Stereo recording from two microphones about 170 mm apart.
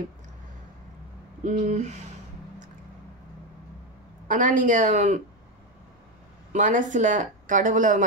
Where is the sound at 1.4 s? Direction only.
45° right (ahead or behind).